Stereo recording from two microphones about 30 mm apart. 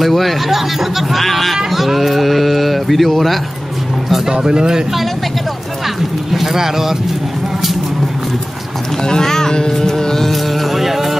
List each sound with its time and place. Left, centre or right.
0.0 s speech: centre
0.6 s speech: centre
1.1 s speech: centre
4.3 s speech: right
6.3 s speech: centre
9.0 s speech: left
9.8 s music: centre
10.3 s music: centre